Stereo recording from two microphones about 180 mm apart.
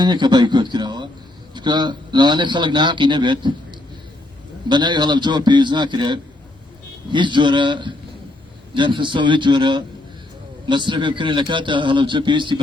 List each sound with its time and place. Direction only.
0.0 s a man's voice: 25° right (ahead or behind)
4.7 s a man's voice: 25° right (ahead or behind)